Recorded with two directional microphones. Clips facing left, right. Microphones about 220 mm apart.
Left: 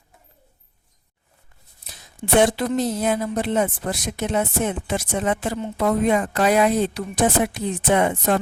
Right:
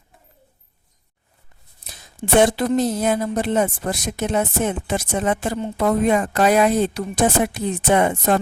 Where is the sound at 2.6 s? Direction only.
45° right (ahead or behind).